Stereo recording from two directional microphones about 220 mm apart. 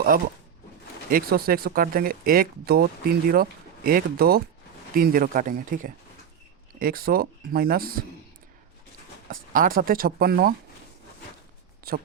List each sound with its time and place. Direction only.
1.1 s speech: 45° right (ahead or behind)
9.3 s speech: 40° right (ahead or behind)
11.9 s speech: 45° right (ahead or behind)